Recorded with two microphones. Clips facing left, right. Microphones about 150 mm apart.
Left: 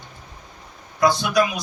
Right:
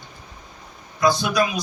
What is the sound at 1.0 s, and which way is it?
Speech, 70° left (ahead or behind).